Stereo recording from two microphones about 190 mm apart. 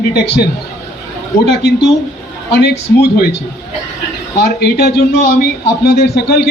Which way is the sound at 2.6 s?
55° left (ahead or behind).